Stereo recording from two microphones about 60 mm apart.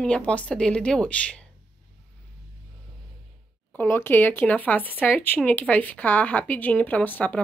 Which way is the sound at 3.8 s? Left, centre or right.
Left.